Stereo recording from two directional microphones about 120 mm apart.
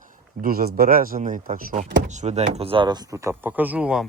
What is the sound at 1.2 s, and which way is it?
Speech, 90° right.